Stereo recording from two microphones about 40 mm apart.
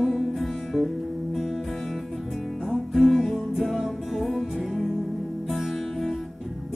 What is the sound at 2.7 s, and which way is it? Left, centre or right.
Music, centre.